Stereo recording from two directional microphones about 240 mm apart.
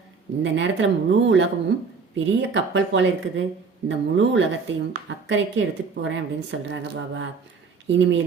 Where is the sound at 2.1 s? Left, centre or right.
Right.